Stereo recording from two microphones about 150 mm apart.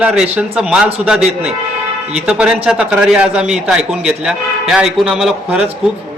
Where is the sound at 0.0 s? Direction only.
5° right (ahead or behind).